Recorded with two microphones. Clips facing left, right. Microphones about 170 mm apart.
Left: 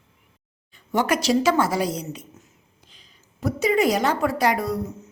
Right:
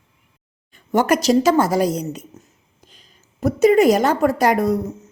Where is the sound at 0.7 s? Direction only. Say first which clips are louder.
Right 5 dB; 50° right (ahead or behind).